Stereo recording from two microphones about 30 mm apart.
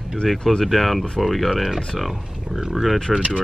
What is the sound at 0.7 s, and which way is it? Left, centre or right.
Speech, centre.